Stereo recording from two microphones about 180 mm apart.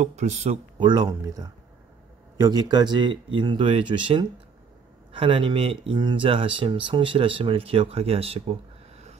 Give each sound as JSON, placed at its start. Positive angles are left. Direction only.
{"t": 0.0, "sound": "speech", "side_deg": -40}
{"t": 0.7, "sound": "speech", "side_deg": -25}